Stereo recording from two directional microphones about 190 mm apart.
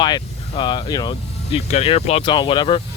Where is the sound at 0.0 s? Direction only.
25° left (ahead or behind).